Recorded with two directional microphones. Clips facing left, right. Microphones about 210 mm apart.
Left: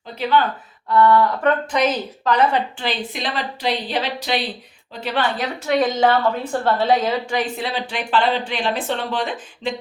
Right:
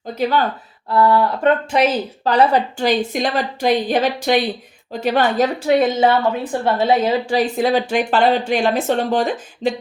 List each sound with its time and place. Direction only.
0.1 s speech: 45° right (ahead or behind)
0.9 s speech: 30° right (ahead or behind)
5.6 s a woman's voice: 25° right (ahead or behind)
6.1 s a woman's voice: 10° right (ahead or behind)
7.0 s speech: 30° right (ahead or behind)